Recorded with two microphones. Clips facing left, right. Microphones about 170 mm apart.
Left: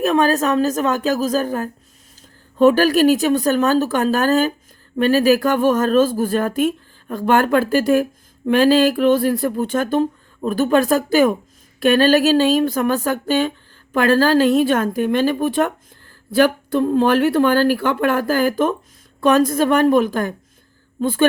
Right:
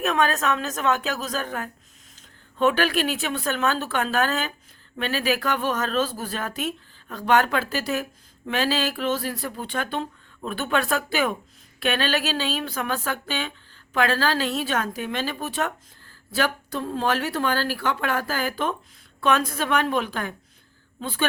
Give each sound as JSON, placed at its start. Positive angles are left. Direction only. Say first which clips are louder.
{"t": 0.0, "sound": "a woman's voice", "louder": "left 7 dB", "side_deg": 35}